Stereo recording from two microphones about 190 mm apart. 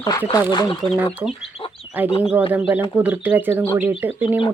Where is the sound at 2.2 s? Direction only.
10° right (ahead or behind).